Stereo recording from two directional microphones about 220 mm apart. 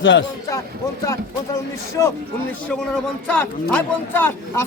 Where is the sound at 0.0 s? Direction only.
60° left (ahead or behind).